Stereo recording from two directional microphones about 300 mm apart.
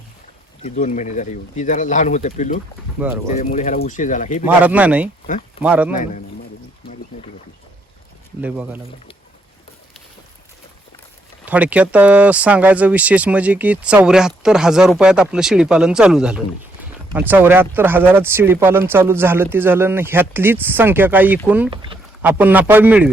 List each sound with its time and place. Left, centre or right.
0.6 s speech: left
3.0 s speech: centre
3.3 s speech: left
4.4 s speech: centre
5.2 s speech: left
5.6 s speech: centre
8.4 s speech: centre
11.4 s speech: centre
21.7 s speech: centre
22.2 s speech: centre